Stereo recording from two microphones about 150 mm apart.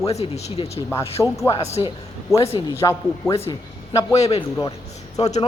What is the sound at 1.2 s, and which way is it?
Speech, 5° left (ahead or behind).